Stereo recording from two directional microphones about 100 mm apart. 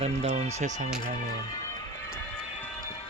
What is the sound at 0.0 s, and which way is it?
Speech, 90° right.